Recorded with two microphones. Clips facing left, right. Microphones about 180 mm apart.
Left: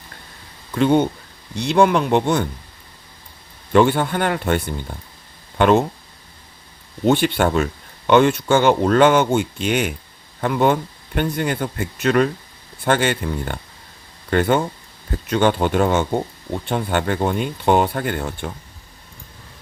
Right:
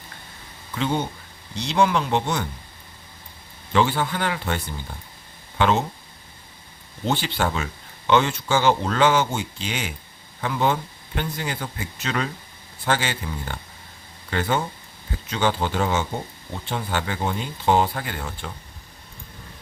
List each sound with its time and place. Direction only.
0.8 s speech: 60° left (ahead or behind)
3.7 s speech: 55° left (ahead or behind)
7.0 s speech: 60° left (ahead or behind)